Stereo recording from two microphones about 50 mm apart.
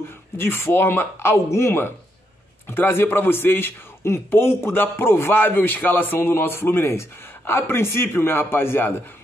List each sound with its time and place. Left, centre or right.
0.4 s a man's voice: left
2.7 s a man's voice: left